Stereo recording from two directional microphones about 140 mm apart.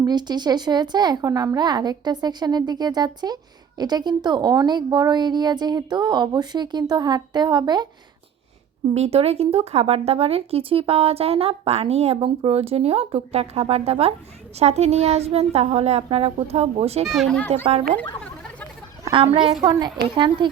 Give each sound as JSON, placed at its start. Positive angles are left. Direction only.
{"t": 0.0, "sound": "a woman's voice", "side_deg": -30}
{"t": 8.9, "sound": "speech", "side_deg": -45}
{"t": 17.1, "sound": "speech", "side_deg": 5}
{"t": 17.5, "sound": "speech", "side_deg": -45}
{"t": 19.1, "sound": "a woman's voice", "side_deg": -40}